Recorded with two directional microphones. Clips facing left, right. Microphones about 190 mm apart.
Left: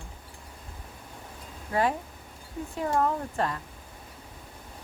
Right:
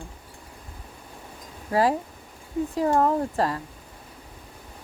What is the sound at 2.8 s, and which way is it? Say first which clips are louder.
Speech: right 5 dB; 35° right (ahead or behind).